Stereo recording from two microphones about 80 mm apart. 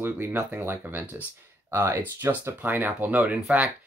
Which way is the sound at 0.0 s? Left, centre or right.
Right.